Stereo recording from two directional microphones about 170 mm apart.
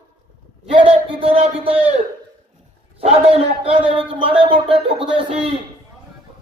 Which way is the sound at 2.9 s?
35° right (ahead or behind).